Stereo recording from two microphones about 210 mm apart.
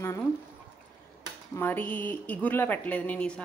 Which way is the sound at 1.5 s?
10° left (ahead or behind).